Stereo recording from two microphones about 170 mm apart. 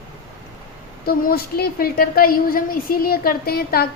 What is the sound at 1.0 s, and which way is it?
A woman's voice, 65° left (ahead or behind).